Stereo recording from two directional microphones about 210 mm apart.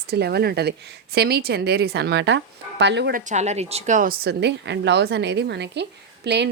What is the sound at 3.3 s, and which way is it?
Speech, 35° right (ahead or behind).